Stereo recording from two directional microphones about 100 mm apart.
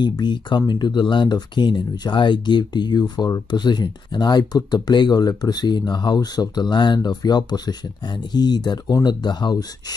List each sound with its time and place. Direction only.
0.0 s speech: 50° left (ahead or behind)